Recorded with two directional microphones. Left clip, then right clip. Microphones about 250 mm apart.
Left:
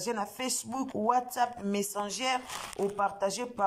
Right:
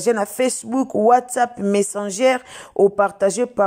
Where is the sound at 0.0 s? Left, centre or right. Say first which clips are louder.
Right 15 dB; right.